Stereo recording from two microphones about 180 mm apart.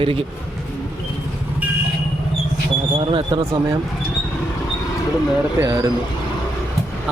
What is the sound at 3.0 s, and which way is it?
Speech, 30° right (ahead or behind).